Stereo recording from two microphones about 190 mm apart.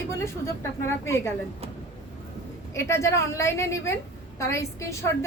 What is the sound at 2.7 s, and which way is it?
A woman's voice, 15° left (ahead or behind).